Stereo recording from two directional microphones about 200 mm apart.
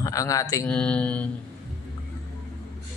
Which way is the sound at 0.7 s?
5° left (ahead or behind).